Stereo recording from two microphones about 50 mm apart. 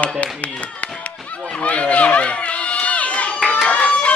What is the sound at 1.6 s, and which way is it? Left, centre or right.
Crowd, left.